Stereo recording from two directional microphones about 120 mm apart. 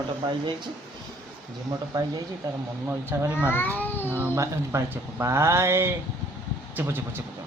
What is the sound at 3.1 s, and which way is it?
Speech, 15° right (ahead or behind).